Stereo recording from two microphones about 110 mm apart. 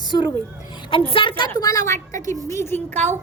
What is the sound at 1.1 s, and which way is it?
Speech, 50° left (ahead or behind).